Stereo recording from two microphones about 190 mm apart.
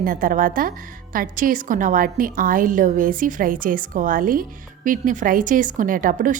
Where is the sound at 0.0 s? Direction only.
45° right (ahead or behind).